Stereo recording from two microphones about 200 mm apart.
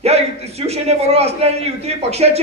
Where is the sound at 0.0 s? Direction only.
30° right (ahead or behind).